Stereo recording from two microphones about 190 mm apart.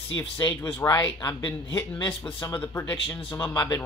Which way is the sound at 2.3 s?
15° left (ahead or behind).